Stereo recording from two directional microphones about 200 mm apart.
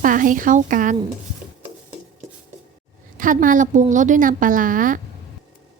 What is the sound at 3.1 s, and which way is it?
A woman's voice, 40° right (ahead or behind).